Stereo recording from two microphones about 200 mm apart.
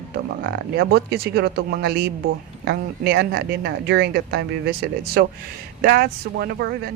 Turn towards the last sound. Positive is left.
turn(degrees=-55)  # may be behind; listen again after turning